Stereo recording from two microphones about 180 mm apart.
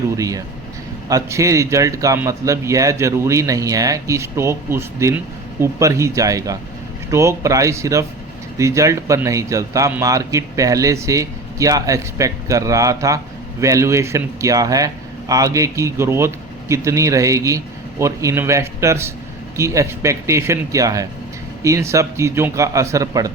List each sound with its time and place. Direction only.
0.2 s a man's voice: 20° right (ahead or behind)